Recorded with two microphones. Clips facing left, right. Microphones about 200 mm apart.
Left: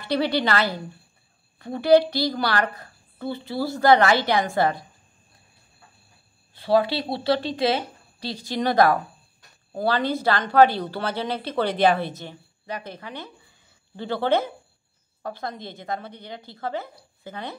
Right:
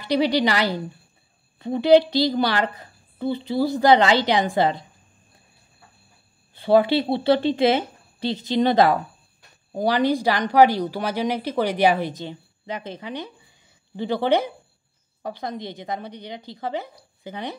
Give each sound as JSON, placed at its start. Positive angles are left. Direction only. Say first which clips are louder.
{"t": 0.0, "sound": "a woman's voice", "louder": "right 3 dB", "side_deg": -15}
{"t": 6.5, "sound": "a woman's voice", "louder": "right 4 dB", "side_deg": -25}